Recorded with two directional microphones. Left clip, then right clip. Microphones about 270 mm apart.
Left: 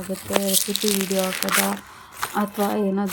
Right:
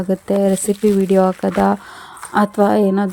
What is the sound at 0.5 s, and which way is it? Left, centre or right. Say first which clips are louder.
Speech: right 7 dB; centre.